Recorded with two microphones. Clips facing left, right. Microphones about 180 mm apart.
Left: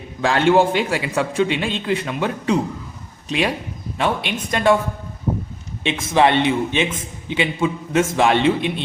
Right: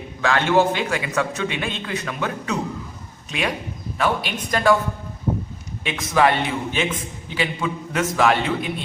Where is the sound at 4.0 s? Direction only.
25° left (ahead or behind).